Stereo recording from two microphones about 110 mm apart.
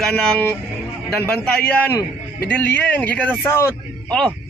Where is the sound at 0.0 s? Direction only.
5° left (ahead or behind).